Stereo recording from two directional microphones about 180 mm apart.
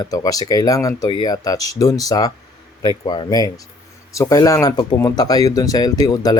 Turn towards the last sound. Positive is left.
turn(degrees=20)  # may be behind; listen again after turning